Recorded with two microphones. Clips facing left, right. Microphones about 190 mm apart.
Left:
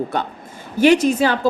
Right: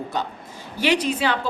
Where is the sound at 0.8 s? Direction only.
45° left (ahead or behind).